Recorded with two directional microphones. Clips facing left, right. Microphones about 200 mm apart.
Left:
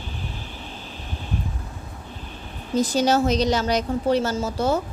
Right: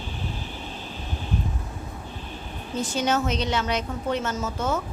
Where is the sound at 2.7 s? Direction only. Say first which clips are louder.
Left 5 dB; 35° left (ahead or behind).